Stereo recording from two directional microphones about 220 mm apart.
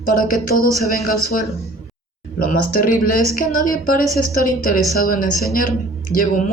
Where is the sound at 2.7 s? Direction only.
40° left (ahead or behind).